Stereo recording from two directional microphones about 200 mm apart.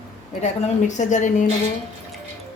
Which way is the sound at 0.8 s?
40° left (ahead or behind).